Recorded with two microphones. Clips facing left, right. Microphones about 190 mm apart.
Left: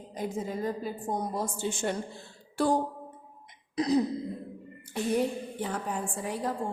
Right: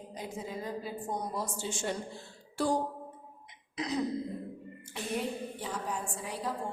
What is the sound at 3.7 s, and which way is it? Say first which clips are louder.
Throat clearing: left 9 dB; 35° left (ahead or behind).